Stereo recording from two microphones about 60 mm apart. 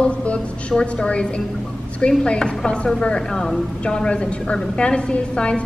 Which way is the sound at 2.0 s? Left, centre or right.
Centre.